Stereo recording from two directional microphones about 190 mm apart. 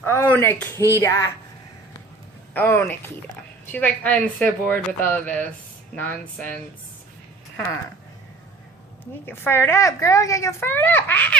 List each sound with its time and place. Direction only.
0.0 s a sound: 10° left (ahead or behind)
0.9 s a woman's voice: 15° left (ahead or behind)
2.5 s a woman's voice: 10° left (ahead or behind)
7.5 s speech: 10° left (ahead or behind)
9.2 s a woman's voice: 10° left (ahead or behind)